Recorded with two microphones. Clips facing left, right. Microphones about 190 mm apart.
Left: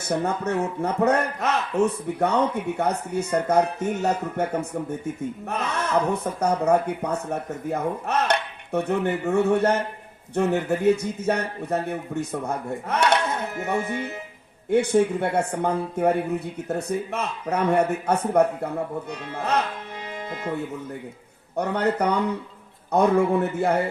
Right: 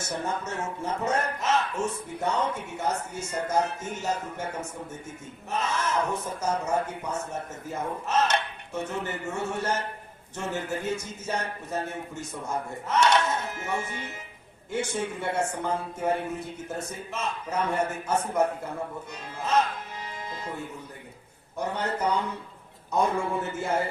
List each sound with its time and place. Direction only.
0.0 s a man's voice: 60° left (ahead or behind)
21.5 s a man's voice: 65° left (ahead or behind)